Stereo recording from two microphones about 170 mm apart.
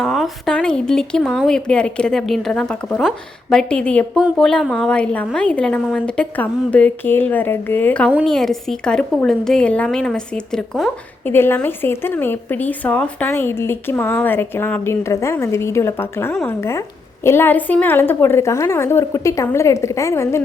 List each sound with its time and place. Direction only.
0.0 s a woman's voice: centre (ahead or behind)
11.3 s a woman's voice: 15° left (ahead or behind)